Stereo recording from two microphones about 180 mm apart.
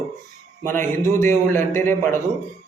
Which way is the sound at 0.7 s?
15° left (ahead or behind).